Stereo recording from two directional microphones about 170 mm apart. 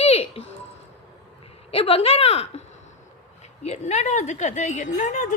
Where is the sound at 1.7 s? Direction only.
35° left (ahead or behind).